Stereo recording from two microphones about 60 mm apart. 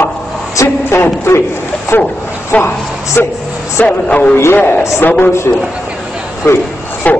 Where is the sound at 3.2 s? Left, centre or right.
Left.